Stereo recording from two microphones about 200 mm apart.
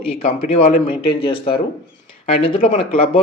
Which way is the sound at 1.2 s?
25° left (ahead or behind).